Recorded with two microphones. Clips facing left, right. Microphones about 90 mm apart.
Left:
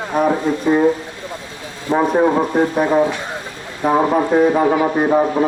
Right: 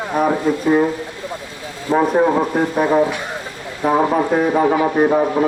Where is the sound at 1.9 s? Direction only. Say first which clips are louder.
Right 1 dB; 20° left (ahead or behind).